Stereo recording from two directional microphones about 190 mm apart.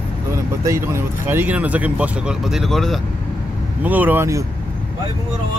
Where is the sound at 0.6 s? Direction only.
15° right (ahead or behind).